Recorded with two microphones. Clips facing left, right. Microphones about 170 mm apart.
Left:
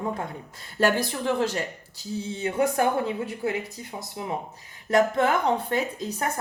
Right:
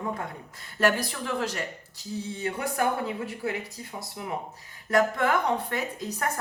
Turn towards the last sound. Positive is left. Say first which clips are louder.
# left 2 dB
turn(degrees=25)  # may be behind; listen again after turning